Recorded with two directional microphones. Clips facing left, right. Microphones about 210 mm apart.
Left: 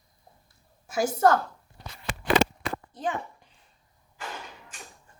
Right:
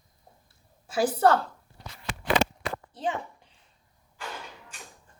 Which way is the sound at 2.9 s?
30° right (ahead or behind).